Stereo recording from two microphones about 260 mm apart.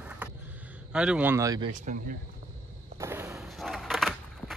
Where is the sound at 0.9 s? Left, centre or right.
Centre.